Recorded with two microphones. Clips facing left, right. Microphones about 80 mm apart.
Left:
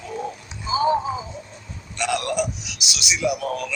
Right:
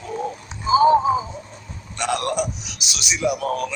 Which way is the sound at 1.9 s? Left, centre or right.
Right.